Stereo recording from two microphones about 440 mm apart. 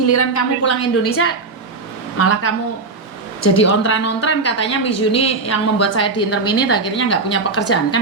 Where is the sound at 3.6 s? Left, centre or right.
Left.